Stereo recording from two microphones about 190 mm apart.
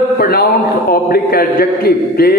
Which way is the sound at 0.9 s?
50° left (ahead or behind).